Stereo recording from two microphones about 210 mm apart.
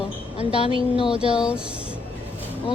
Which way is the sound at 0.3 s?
25° left (ahead or behind).